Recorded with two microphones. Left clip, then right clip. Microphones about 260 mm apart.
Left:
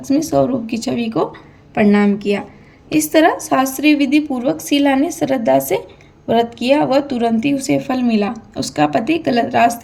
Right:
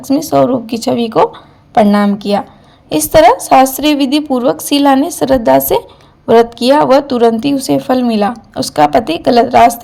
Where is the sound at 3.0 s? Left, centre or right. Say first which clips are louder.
Right 7 dB; right.